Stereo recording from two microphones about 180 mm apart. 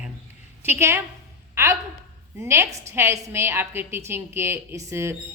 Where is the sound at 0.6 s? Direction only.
15° right (ahead or behind).